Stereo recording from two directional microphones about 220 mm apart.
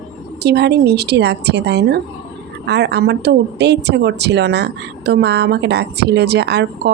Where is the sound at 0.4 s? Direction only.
50° right (ahead or behind).